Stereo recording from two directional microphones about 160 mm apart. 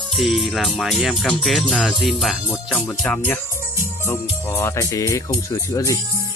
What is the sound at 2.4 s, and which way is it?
Speech, 10° left (ahead or behind).